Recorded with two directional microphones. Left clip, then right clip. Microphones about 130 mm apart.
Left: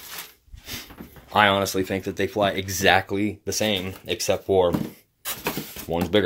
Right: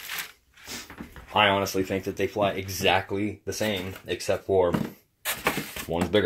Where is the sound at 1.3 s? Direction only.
30° left (ahead or behind); by 3.0 s 45° left (ahead or behind).